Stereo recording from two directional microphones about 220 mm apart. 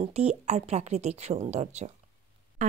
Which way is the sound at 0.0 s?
30° right (ahead or behind).